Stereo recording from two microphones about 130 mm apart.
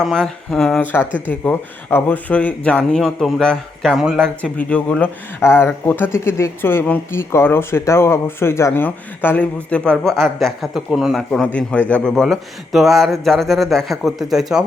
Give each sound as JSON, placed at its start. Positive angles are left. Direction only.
{"t": 0.0, "sound": "speech", "side_deg": 5}
{"t": 4.4, "sound": "speech", "side_deg": 10}
{"t": 5.4, "sound": "speech", "side_deg": 20}